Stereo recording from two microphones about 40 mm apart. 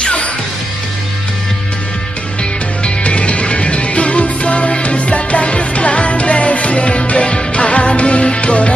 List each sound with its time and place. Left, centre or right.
0.0 s music: left
2.8 s music: left